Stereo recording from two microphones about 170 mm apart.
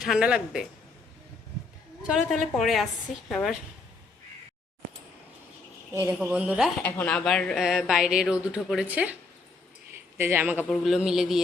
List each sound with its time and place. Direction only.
0.0 s speech: 5° right (ahead or behind)
2.0 s speech: 5° right (ahead or behind)
5.9 s speech: 15° right (ahead or behind)
6.8 s speech: 10° left (ahead or behind); by 9.1 s 10° right (ahead or behind)
9.9 s a sound: 10° right (ahead or behind)
10.6 s speech: centre (ahead or behind)